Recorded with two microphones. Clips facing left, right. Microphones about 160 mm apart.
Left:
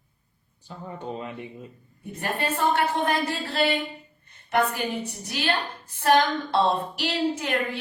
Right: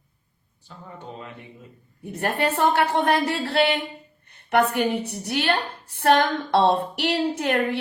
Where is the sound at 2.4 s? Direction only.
65° right (ahead or behind).